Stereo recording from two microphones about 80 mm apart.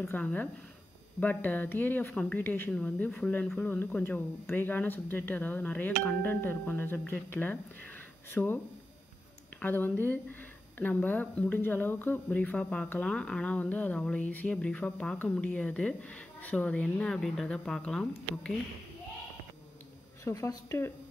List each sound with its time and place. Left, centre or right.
0.1 s speech: centre
2.7 s speech: centre
9.6 s speech: left
20.2 s a woman's voice: left